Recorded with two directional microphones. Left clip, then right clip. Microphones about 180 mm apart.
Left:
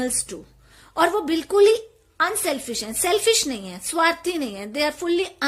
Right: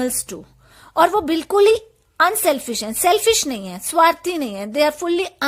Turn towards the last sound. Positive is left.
turn(degrees=-35)  # may be behind; listen again after turning